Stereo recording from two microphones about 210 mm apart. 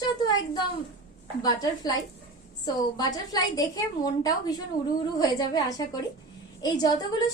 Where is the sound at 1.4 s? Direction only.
20° left (ahead or behind).